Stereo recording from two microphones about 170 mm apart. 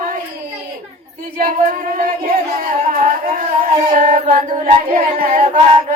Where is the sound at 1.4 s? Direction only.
55° right (ahead or behind).